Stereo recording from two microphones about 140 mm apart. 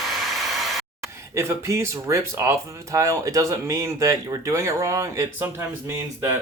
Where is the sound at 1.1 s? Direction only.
20° right (ahead or behind).